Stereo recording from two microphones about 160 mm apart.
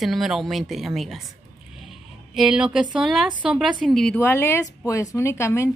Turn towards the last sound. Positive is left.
turn(degrees=15)  # may be behind; listen again after turning